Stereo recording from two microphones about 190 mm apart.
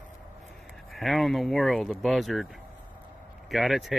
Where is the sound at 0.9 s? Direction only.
Centre (ahead or behind).